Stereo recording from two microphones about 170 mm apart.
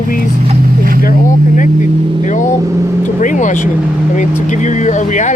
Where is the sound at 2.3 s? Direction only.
45° left (ahead or behind).